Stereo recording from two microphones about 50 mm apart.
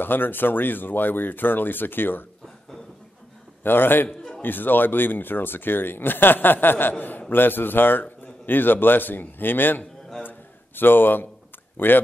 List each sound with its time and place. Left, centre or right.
0.0 s speech: left
3.6 s speech: left
10.2 s a sound: left
11.7 s speech: left